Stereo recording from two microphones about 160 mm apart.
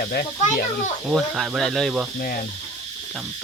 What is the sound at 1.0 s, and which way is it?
Speech, centre (ahead or behind).